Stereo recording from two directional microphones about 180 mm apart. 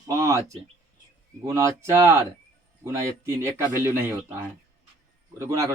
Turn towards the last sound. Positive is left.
turn(degrees=-15)  # may be behind; listen again after turning